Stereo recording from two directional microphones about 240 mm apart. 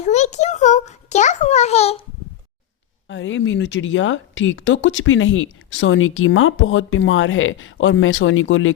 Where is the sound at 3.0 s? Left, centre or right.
Left.